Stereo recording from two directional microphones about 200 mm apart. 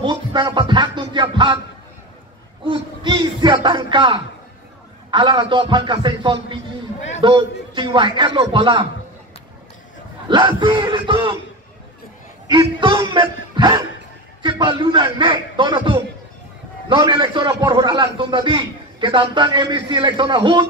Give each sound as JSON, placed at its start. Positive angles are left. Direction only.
{"t": 0.0, "sound": "a man's voice", "side_deg": -25}
{"t": 2.6, "sound": "a man's voice", "side_deg": -25}
{"t": 10.2, "sound": "a man's voice", "side_deg": -25}
{"t": 12.5, "sound": "a man's voice", "side_deg": -25}